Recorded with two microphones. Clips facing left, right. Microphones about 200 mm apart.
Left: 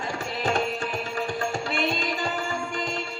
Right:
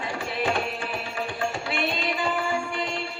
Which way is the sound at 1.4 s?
45° left (ahead or behind).